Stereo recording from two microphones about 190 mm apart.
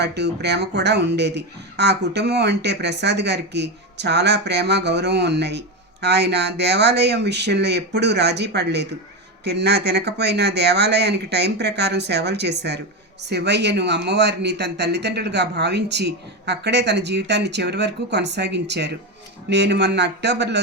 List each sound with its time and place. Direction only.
0.0 s speech: 60° right (ahead or behind)